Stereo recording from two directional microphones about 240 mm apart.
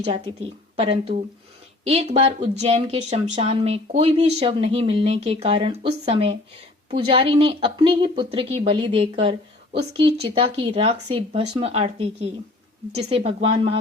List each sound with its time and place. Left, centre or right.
0.8 s speech: right
10.3 s speech: right